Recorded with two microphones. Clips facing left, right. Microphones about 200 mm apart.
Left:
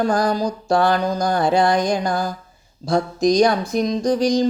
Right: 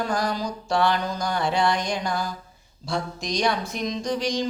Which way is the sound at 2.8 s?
40° left (ahead or behind).